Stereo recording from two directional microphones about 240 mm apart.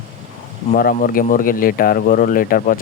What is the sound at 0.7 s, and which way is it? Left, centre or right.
Speech, left.